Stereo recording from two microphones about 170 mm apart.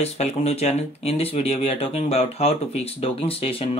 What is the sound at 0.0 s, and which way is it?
Speech, 40° left (ahead or behind).